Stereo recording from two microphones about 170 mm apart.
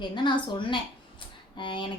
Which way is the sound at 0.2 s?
30° left (ahead or behind).